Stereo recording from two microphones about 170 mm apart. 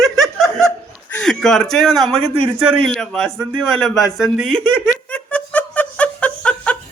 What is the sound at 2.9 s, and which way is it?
A man's voice, 5° left (ahead or behind).